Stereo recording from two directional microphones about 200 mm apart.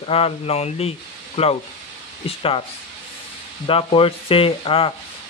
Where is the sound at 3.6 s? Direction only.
25° left (ahead or behind).